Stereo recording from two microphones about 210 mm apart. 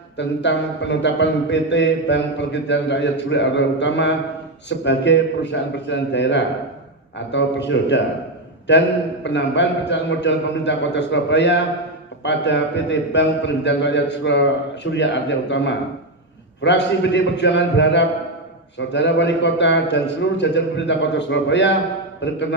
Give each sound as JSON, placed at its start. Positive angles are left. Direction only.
{"t": 0.2, "sound": "speech", "side_deg": 55}